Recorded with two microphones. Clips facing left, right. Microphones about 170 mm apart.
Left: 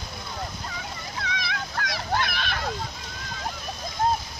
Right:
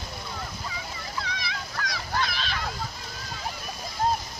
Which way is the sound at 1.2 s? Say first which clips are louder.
Left 5 dB; 60° left (ahead or behind).